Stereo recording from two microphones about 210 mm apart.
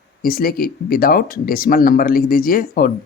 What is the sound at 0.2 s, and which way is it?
Speech, 45° left (ahead or behind).